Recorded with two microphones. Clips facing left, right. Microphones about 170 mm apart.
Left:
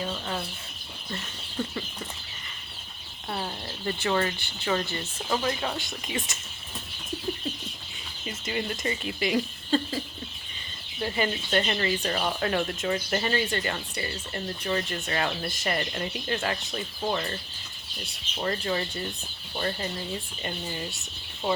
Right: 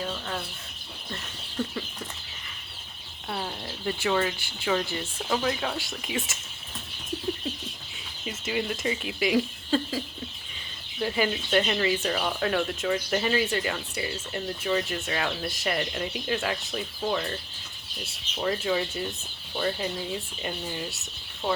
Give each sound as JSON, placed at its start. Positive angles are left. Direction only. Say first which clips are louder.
{"t": 0.0, "sound": "speech", "louder": "left 1 dB", "side_deg": 5}
{"t": 3.2, "sound": "speech", "louder": "even", "side_deg": 5}
{"t": 8.2, "sound": "speech", "louder": "right 2 dB", "side_deg": -5}
{"t": 11.0, "sound": "speech", "louder": "right 2 dB", "side_deg": -5}
{"t": 18.4, "sound": "speech", "louder": "right 2 dB", "side_deg": -5}